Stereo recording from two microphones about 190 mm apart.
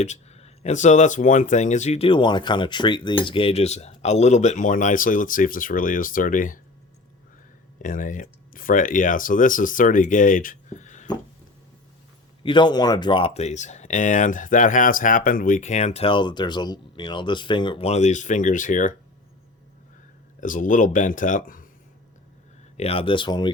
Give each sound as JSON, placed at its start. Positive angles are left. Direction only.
{"t": 0.0, "sound": "speech", "side_deg": 35}
{"t": 7.8, "sound": "speech", "side_deg": 45}
{"t": 12.4, "sound": "speech", "side_deg": 25}
{"t": 20.4, "sound": "speech", "side_deg": 45}
{"t": 22.8, "sound": "speech", "side_deg": 30}